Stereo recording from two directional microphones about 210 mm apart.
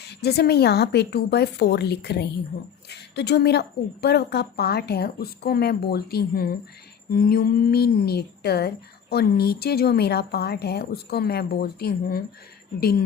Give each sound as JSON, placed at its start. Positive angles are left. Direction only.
{"t": 0.0, "sound": "speech", "side_deg": 50}